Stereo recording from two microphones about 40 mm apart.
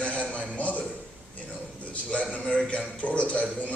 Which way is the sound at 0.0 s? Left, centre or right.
Left.